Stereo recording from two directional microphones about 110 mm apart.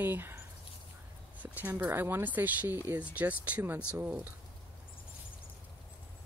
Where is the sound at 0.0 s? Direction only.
20° right (ahead or behind).